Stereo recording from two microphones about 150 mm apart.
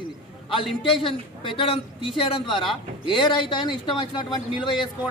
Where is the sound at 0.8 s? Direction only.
35° left (ahead or behind).